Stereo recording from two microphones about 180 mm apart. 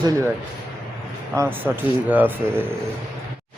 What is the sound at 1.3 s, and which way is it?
A man's voice, 10° right (ahead or behind).